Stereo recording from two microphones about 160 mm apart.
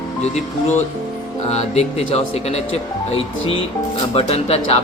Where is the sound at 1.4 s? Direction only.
40° left (ahead or behind).